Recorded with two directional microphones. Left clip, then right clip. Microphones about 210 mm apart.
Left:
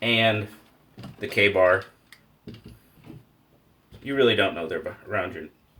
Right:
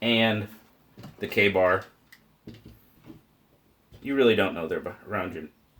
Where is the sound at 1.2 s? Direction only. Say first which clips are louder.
Left 2 dB; 35° right (ahead or behind).